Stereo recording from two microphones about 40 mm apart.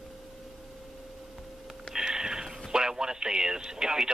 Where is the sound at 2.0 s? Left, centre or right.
Centre.